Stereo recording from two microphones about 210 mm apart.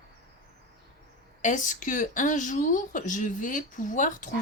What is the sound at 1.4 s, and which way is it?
Speech, 35° left (ahead or behind).